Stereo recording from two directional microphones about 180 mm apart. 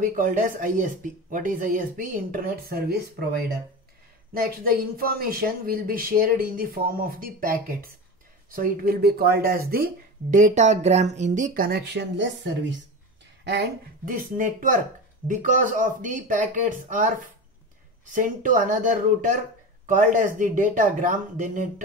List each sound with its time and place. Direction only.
0.0 s speech: 45° right (ahead or behind)
4.3 s speech: 55° right (ahead or behind)
10.3 s speech: 45° right (ahead or behind); by 12.7 s 80° right
13.4 s speech: 65° right (ahead or behind); by 17.1 s 45° right (ahead or behind)
18.1 s speech: 45° right (ahead or behind)